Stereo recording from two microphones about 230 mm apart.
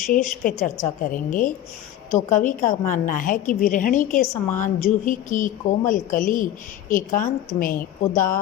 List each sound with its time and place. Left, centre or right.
0.1 s a woman's voice: left